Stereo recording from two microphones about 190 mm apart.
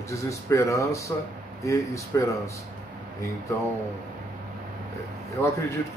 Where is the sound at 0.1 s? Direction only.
15° left (ahead or behind).